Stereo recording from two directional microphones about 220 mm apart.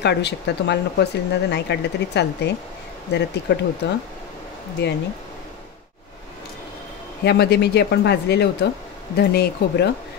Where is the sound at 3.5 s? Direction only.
50° left (ahead or behind).